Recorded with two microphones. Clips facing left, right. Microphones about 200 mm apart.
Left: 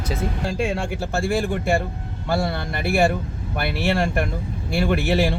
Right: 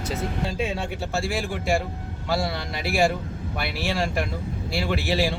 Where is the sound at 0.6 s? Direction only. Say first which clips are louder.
Left 4 dB; 55° left (ahead or behind).